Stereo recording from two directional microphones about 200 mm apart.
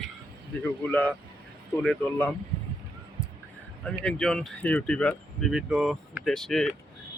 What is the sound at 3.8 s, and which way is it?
Speech, 5° left (ahead or behind).